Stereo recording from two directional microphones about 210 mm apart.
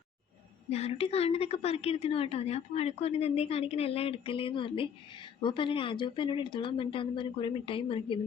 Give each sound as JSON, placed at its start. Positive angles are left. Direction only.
{"t": 0.7, "sound": "a woman's voice", "side_deg": 30}